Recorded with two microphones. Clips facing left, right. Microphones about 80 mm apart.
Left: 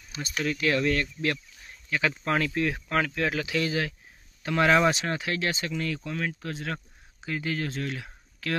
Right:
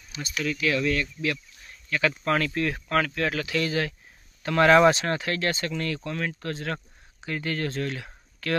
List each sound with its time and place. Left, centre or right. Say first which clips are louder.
0.1 s speech: even; left
1.9 s speech: right 2 dB; centre